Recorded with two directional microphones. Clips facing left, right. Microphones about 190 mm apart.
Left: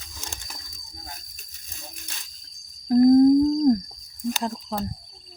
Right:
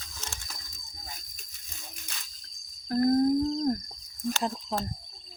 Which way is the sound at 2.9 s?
15° left (ahead or behind).